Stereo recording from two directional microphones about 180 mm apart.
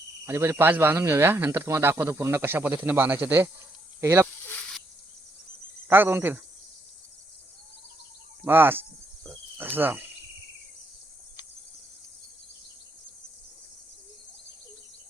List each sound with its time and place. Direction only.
0.3 s speech: 15° right (ahead or behind)
5.9 s speech: 10° right (ahead or behind)
8.4 s speech: 10° right (ahead or behind)